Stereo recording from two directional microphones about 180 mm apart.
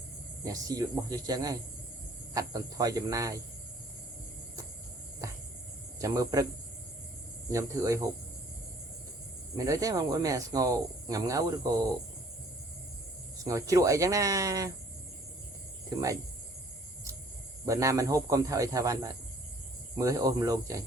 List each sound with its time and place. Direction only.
0.4 s speech: 20° right (ahead or behind)
5.2 s a sound: 20° right (ahead or behind)
6.0 s speech: 20° right (ahead or behind)
7.5 s speech: 15° right (ahead or behind)
9.6 s speech: 20° right (ahead or behind)
13.4 s speech: 20° right (ahead or behind)
17.7 s speech: 15° right (ahead or behind)